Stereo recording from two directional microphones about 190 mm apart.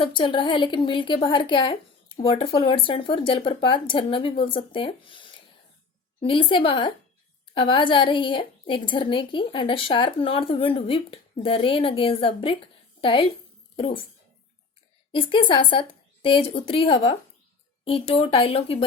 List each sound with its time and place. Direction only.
0.0 s a woman's voice: 25° left (ahead or behind)
15.1 s a woman's voice: 25° left (ahead or behind)